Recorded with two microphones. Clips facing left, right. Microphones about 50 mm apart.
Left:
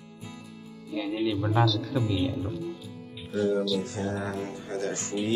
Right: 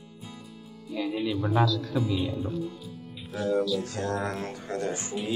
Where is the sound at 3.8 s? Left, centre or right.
Right.